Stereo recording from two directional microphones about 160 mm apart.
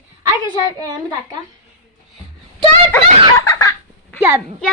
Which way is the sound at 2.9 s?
15° left (ahead or behind).